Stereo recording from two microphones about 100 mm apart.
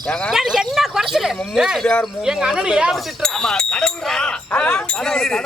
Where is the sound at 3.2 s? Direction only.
5° left (ahead or behind).